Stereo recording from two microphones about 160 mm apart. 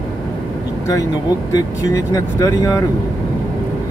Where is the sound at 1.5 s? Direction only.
20° left (ahead or behind).